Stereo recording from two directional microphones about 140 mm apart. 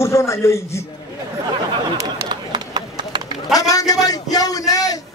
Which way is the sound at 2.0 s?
30° right (ahead or behind).